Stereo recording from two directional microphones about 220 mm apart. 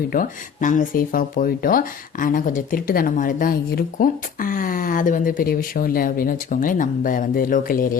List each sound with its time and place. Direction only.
0.1 s speech: 35° left (ahead or behind)